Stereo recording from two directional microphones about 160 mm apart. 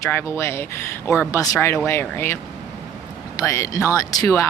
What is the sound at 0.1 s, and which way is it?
Speech, 15° left (ahead or behind).